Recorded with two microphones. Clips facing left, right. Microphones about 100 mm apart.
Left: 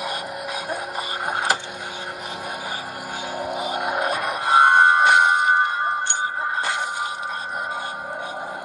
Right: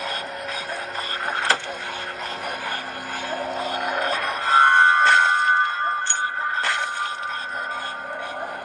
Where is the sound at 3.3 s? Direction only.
10° left (ahead or behind).